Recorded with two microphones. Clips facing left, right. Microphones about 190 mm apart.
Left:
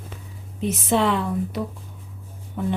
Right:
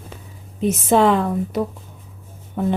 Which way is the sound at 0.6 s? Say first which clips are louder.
Right 5 dB; 45° right (ahead or behind).